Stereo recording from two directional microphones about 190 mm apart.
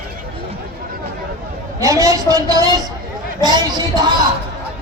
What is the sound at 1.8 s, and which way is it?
A woman's voice, 15° right (ahead or behind).